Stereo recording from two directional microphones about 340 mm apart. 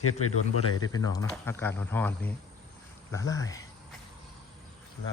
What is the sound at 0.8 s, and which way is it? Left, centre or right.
Speech, centre.